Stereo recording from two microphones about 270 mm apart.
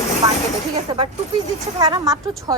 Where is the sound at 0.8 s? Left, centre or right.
Centre.